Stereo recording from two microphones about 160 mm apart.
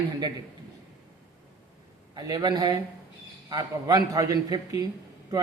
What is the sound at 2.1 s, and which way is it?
Speech, 25° right (ahead or behind).